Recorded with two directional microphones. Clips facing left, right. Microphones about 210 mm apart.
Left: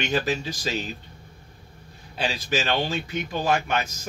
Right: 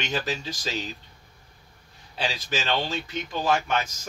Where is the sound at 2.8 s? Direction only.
10° left (ahead or behind).